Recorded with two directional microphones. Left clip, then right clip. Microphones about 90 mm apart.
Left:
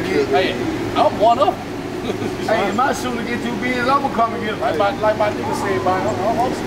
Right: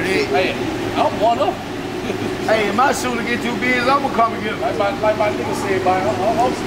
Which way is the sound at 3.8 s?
Centre (ahead or behind).